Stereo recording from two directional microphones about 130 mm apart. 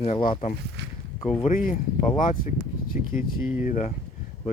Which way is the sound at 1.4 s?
90° left.